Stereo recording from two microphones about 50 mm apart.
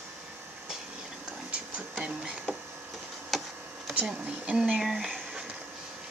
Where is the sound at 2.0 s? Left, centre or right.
Centre.